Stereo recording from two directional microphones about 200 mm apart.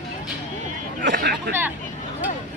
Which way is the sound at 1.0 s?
55° right (ahead or behind).